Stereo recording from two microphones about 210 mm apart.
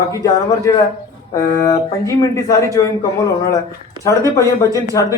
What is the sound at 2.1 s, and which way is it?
Speech, 15° left (ahead or behind).